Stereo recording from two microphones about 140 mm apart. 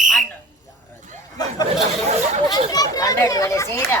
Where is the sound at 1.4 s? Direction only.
30° left (ahead or behind).